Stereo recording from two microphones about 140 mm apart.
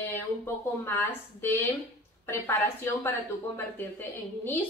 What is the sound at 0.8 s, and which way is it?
A woman's voice, 15° left (ahead or behind).